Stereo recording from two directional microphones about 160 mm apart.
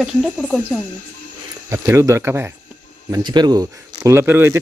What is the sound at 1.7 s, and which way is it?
Speech, 20° right (ahead or behind).